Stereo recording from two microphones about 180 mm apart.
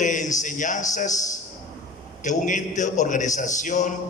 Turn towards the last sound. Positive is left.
turn(degrees=45)  # may be behind; listen again after turning